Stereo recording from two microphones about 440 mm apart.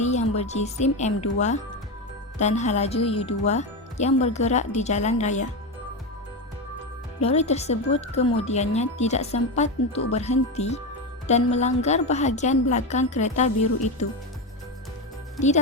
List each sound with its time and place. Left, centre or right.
0.0 s speech: centre
7.2 s speech: centre
15.4 s speech: centre